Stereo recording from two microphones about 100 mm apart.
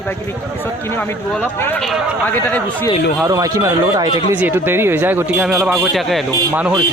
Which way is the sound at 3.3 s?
35° right (ahead or behind).